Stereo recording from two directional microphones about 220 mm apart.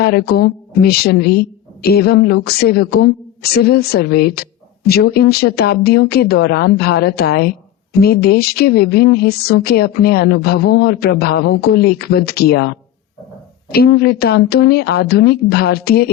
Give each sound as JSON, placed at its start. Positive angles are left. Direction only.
{"t": 0.0, "sound": "a woman's voice", "side_deg": 45}